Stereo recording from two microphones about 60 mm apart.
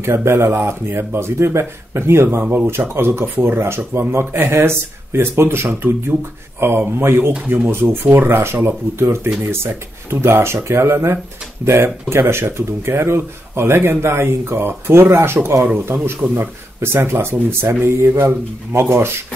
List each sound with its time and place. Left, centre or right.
0.0 s speech: right
6.6 s speech: right